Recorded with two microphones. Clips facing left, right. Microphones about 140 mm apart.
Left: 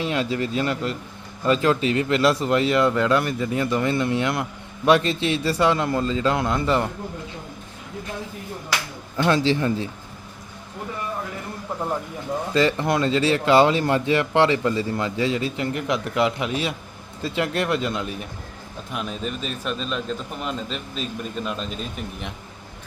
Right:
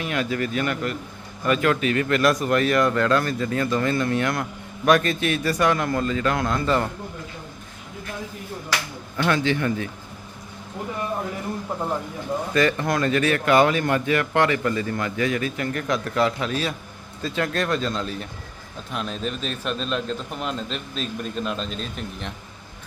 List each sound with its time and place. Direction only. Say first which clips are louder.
0.0 s speech: left 1 dB; 25° left (ahead or behind)
9.1 s speech: left 2 dB; 25° left (ahead or behind)
12.5 s a man's voice: left 1 dB; 25° left (ahead or behind); by 22.3 s 5° left (ahead or behind)